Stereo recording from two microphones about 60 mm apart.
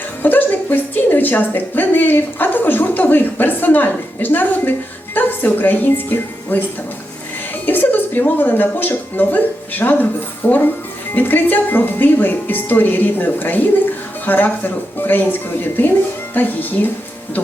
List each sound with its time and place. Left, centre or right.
0.2 s a woman's voice: left
7.6 s speech: left